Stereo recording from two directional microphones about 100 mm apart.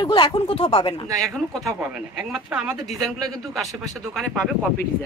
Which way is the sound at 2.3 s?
5° right (ahead or behind).